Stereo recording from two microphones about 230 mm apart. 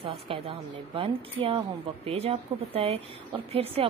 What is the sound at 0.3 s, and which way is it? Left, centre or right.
Speech, right.